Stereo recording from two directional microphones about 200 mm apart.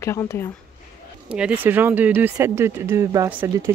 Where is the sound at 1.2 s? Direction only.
5° right (ahead or behind).